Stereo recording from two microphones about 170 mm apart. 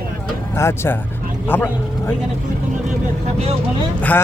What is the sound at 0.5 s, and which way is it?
Speech, 15° left (ahead or behind).